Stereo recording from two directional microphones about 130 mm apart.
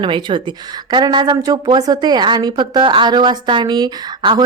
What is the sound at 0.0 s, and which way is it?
Speech, 40° right (ahead or behind).